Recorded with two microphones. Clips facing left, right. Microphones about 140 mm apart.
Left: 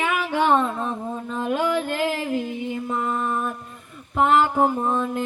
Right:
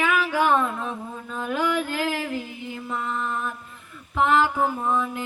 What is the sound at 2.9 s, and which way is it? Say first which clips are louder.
Mantra: left 2 dB; 50° left (ahead or behind).